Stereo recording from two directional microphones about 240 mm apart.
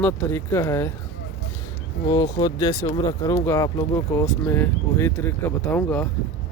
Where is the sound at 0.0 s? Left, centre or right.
Centre.